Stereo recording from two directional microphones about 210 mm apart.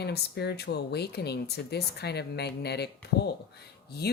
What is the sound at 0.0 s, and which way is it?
Speech, 50° left (ahead or behind).